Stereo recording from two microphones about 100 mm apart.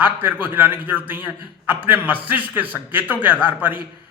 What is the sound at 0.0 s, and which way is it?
A man's voice, 20° right (ahead or behind).